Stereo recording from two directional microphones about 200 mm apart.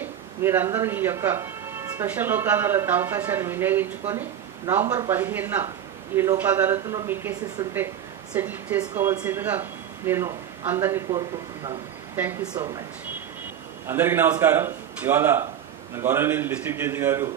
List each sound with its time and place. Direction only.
0.0 s speech: 10° right (ahead or behind)
13.8 s speech: 10° right (ahead or behind)